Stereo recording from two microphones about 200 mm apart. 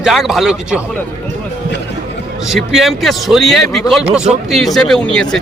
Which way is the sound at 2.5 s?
Centre (ahead or behind).